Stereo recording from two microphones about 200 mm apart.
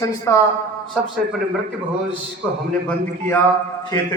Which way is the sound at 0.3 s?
15° left (ahead or behind).